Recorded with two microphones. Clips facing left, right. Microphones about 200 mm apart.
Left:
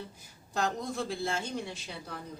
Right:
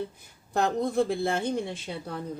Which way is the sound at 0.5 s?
55° right (ahead or behind).